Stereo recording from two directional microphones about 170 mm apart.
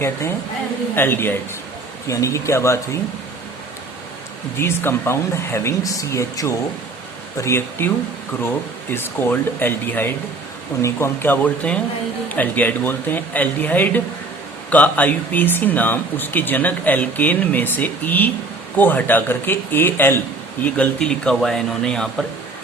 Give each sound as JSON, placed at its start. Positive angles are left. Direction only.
{"t": 0.0, "sound": "speech", "side_deg": 15}
{"t": 4.5, "sound": "speech", "side_deg": 15}
{"t": 8.9, "sound": "a man's voice", "side_deg": 10}